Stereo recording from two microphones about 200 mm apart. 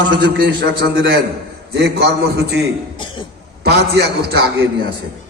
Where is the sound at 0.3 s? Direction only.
55° right (ahead or behind).